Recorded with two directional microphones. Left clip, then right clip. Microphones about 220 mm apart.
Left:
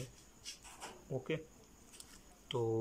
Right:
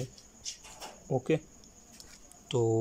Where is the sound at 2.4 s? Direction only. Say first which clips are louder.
Right 8 dB; 15° right (ahead or behind).